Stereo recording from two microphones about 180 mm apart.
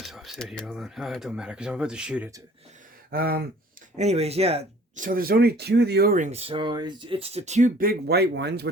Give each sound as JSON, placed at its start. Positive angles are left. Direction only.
{"t": 0.0, "sound": "speech", "side_deg": 0}
{"t": 3.1, "sound": "speech", "side_deg": -55}
{"t": 3.9, "sound": "speech", "side_deg": -35}